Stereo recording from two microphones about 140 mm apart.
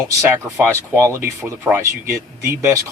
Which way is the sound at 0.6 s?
20° right (ahead or behind).